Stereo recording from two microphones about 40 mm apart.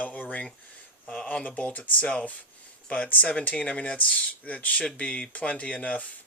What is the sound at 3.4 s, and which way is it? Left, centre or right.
Speech, left.